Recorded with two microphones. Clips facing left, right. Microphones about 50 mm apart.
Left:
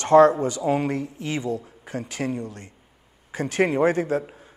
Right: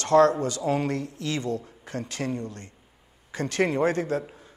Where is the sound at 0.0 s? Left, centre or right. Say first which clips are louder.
Left 4 dB; left.